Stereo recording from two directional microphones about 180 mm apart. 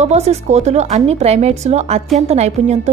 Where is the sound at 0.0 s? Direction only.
40° right (ahead or behind).